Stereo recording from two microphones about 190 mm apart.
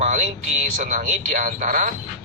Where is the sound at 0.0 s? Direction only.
40° right (ahead or behind).